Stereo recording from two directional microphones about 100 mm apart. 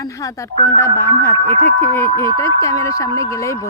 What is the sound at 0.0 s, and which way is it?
Speech, 35° left (ahead or behind).